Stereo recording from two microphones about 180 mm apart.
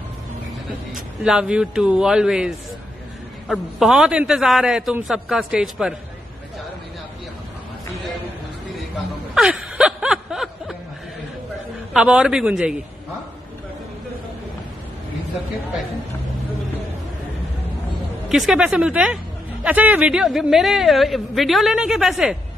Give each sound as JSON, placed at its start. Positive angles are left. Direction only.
{"t": 0.7, "sound": "a man's voice", "side_deg": -5}
{"t": 9.3, "sound": "a sound", "side_deg": -5}
{"t": 11.9, "sound": "a man's voice", "side_deg": -5}
{"t": 18.3, "sound": "a man's voice", "side_deg": 0}